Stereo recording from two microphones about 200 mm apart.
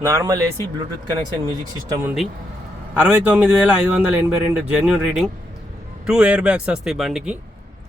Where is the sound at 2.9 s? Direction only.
5° right (ahead or behind).